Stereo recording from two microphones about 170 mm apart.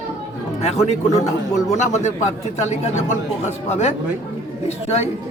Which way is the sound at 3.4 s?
40° left (ahead or behind).